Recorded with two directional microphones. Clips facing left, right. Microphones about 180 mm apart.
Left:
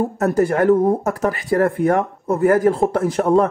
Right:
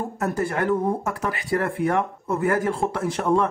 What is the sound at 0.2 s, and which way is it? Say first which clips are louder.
Speech: left 7 dB; 45° left (ahead or behind).